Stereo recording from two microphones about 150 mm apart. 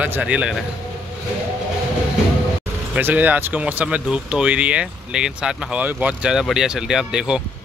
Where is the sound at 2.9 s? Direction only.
10° right (ahead or behind).